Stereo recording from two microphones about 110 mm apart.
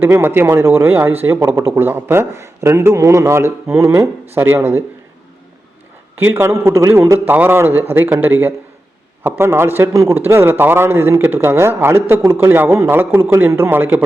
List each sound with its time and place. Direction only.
0.0 s a man's voice: 20° right (ahead or behind)
6.1 s a man's voice: 20° right (ahead or behind)